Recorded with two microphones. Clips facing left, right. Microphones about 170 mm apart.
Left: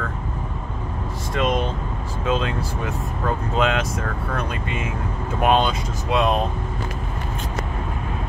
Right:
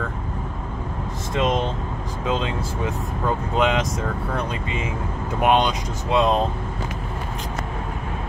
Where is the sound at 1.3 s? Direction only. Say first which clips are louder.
Even; 25° right (ahead or behind).